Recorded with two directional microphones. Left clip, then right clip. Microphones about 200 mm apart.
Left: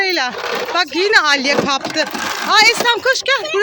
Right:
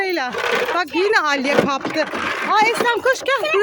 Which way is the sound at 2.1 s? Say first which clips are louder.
Left 1 dB; 60° left (ahead or behind).